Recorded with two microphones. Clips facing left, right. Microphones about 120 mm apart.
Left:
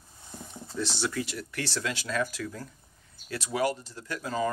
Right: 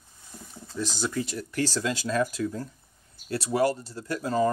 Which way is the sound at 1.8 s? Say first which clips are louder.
Right 2 dB; 30° right (ahead or behind).